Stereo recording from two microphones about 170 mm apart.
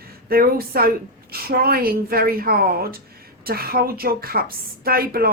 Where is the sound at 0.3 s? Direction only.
60° right (ahead or behind).